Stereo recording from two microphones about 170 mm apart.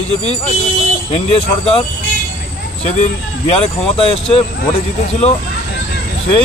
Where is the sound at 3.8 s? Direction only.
35° left (ahead or behind).